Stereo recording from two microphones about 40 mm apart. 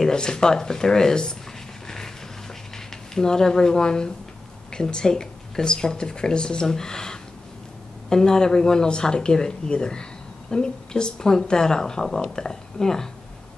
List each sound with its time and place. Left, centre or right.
0.1 s speech: centre
2.9 s speech: centre